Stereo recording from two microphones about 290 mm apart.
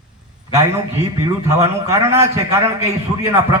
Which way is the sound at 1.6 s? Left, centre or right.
Centre.